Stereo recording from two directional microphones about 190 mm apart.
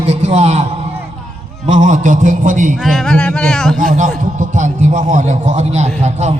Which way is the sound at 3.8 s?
40° right (ahead or behind).